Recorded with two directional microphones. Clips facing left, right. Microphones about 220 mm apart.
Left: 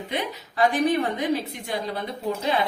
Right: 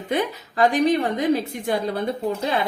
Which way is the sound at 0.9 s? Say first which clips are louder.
Right 3 dB; 40° right (ahead or behind).